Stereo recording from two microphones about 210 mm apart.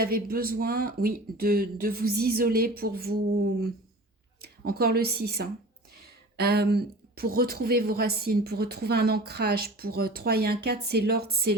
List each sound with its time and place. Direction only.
0.0 s a woman's voice: 45° right (ahead or behind)
4.4 s a woman's voice: 45° right (ahead or behind)